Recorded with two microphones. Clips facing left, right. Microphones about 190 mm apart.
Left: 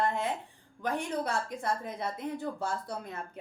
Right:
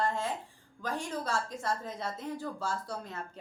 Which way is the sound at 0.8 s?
60° left (ahead or behind).